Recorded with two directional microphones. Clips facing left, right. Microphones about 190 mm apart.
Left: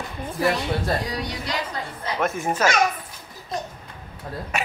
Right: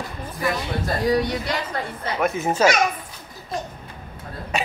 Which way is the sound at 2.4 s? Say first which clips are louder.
Right 6 dB; 25° right (ahead or behind).